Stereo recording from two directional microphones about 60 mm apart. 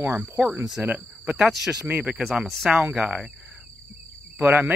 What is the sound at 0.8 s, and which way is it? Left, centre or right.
Speech, right.